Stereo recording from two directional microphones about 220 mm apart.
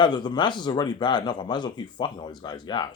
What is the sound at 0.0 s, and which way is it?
A man's voice, 20° left (ahead or behind).